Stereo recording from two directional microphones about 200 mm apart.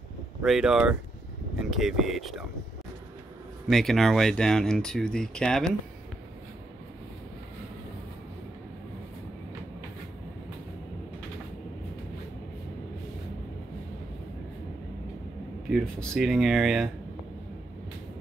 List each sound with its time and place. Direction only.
0.4 s speech: 5° right (ahead or behind)
3.6 s speech: centre (ahead or behind)
15.7 s speech: 5° left (ahead or behind)